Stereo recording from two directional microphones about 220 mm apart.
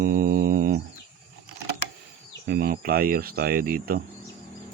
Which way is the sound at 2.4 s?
45° right (ahead or behind).